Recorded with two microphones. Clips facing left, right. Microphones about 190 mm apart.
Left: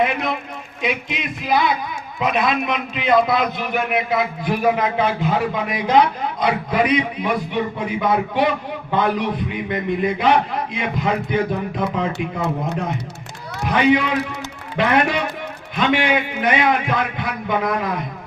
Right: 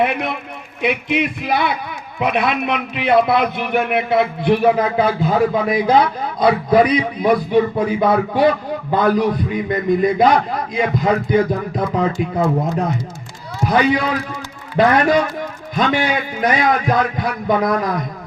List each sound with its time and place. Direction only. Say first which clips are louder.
0.0 s a man's voice: right 1 dB; 60° right (ahead or behind)
4.6 s a man's voice: even; 35° right (ahead or behind)
13.7 s a man's voice: even; 35° right (ahead or behind)